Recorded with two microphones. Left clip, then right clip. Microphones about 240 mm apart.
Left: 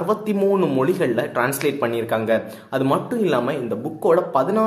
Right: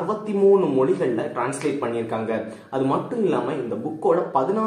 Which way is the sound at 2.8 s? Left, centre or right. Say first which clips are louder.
Left 2 dB; left.